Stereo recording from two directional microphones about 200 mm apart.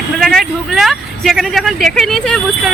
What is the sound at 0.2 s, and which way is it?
Speech, centre (ahead or behind).